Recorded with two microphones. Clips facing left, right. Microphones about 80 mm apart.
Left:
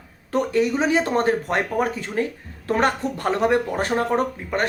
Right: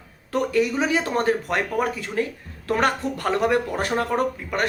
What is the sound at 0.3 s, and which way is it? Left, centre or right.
Speech, left.